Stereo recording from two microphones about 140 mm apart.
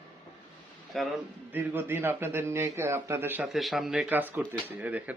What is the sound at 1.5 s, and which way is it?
A man's voice, 15° right (ahead or behind).